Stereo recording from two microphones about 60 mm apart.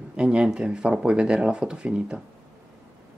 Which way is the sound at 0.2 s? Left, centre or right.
Centre.